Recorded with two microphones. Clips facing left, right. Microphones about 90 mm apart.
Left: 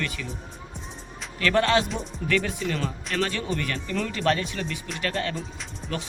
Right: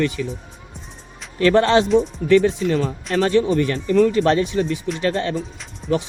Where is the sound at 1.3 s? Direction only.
30° right (ahead or behind).